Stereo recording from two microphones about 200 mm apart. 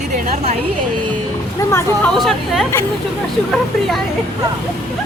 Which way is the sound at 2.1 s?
Centre (ahead or behind).